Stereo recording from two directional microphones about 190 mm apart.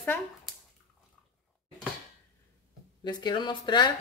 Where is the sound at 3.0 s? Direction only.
25° left (ahead or behind).